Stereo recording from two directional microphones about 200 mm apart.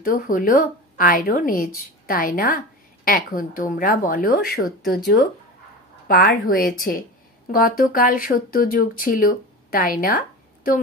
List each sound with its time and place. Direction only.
0.0 s speech: 45° left (ahead or behind)